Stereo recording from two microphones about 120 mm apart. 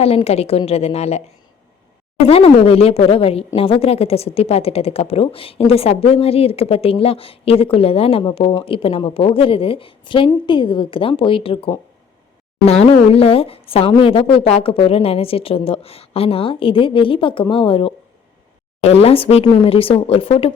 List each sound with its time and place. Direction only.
0.0 s speech: 55° left (ahead or behind)
2.2 s a woman's voice: 55° left (ahead or behind)
12.6 s a woman's voice: 60° left (ahead or behind)